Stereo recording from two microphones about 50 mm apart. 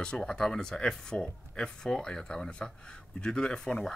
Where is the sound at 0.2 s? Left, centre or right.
Centre.